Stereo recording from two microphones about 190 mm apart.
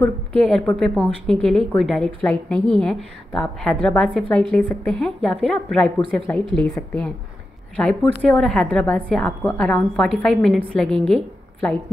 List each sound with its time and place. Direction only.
0.0 s a woman's voice: 5° left (ahead or behind)